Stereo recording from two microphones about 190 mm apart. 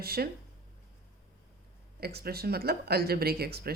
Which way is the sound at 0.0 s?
55° right (ahead or behind).